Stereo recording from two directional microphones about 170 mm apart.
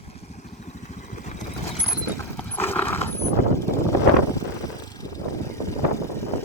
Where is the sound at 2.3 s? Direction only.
10° left (ahead or behind).